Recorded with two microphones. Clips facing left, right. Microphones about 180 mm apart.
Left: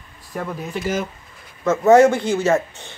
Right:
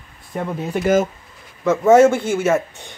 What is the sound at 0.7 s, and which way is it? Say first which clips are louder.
Speech: right 8 dB; 50° right (ahead or behind).